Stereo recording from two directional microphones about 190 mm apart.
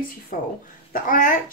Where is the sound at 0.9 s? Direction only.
45° left (ahead or behind).